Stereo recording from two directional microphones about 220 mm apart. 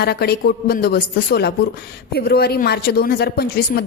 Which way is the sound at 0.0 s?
45° left (ahead or behind).